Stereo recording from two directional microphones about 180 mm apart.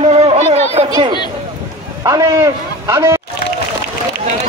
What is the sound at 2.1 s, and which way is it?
A man's voice, 15° right (ahead or behind).